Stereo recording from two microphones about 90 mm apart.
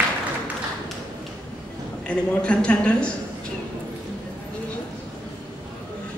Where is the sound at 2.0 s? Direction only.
10° left (ahead or behind).